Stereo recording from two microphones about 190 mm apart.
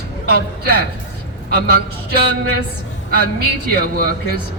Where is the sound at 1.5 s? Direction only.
55° right (ahead or behind).